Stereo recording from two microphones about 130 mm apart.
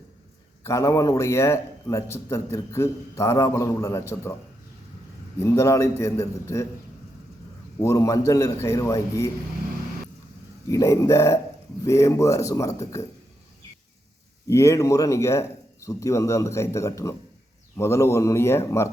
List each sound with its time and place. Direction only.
0.6 s a man's voice: 25° left (ahead or behind)
5.4 s a man's voice: 20° left (ahead or behind)
7.8 s a man's voice: 25° left (ahead or behind)
10.7 s a man's voice: 25° left (ahead or behind)
14.4 s a man's voice: 20° left (ahead or behind)